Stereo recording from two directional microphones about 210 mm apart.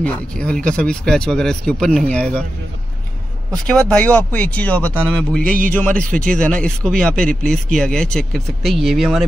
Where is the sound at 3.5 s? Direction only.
5° left (ahead or behind).